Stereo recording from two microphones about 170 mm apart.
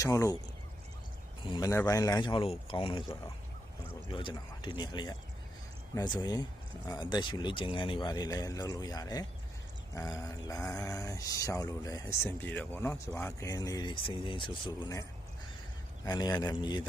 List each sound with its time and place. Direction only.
0.0 s speech: 20° left (ahead or behind)
1.5 s speech: 25° left (ahead or behind)
4.1 s speech: 30° left (ahead or behind)
16.0 s speech: 25° left (ahead or behind)